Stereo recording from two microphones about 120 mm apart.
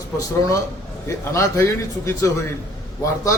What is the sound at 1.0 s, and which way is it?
Speech, 25° left (ahead or behind).